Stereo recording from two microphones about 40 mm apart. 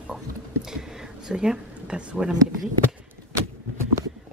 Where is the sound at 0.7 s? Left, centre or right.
Centre.